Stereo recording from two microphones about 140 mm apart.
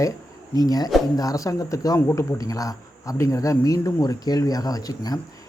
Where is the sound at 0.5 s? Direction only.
25° left (ahead or behind).